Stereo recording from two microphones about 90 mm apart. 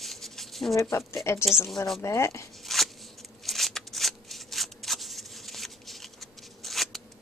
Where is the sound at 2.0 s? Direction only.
35° left (ahead or behind).